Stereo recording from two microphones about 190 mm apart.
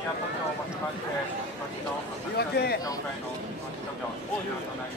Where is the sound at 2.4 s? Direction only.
55° left (ahead or behind).